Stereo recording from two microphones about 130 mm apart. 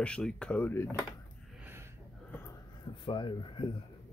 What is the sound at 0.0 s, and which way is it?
Speech, 5° left (ahead or behind).